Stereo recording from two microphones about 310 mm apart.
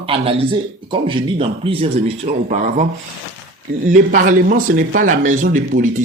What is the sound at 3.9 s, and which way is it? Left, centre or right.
Speech, right.